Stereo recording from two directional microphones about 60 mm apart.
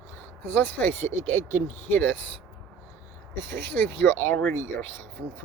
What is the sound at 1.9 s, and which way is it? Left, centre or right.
Speech, left.